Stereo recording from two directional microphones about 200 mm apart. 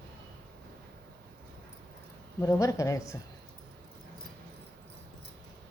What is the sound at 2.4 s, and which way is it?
Speech, 15° left (ahead or behind).